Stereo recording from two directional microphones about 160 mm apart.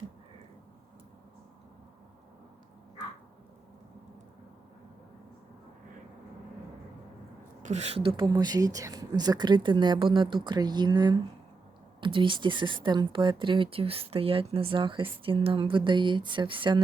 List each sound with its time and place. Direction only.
7.6 s a woman's voice: 45° right (ahead or behind)